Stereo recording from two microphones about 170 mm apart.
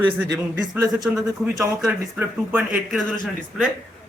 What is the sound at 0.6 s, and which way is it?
Speech, 25° right (ahead or behind).